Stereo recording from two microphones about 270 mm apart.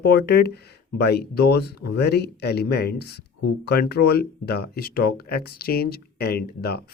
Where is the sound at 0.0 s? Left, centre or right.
Left.